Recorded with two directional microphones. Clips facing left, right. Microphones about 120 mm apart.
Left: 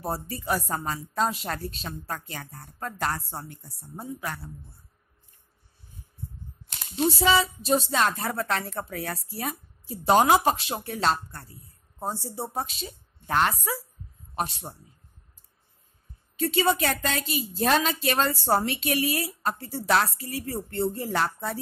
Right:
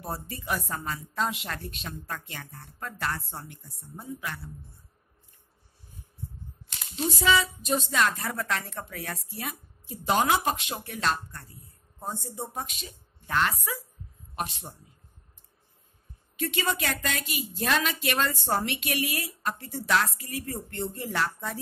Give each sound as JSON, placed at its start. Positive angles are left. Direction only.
{"t": 0.0, "sound": "speech", "side_deg": 35}
{"t": 7.2, "sound": "a man's voice", "side_deg": 30}
{"t": 16.3, "sound": "speech", "side_deg": 35}